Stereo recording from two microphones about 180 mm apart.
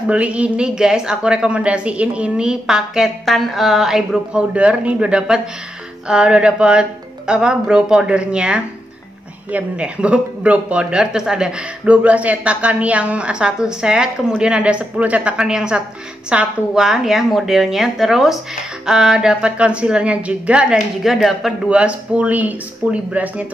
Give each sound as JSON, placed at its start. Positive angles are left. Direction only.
{"t": 0.0, "sound": "a woman's voice", "side_deg": -5}